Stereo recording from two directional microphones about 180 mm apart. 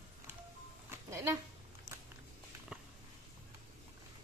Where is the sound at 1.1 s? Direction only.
15° right (ahead or behind).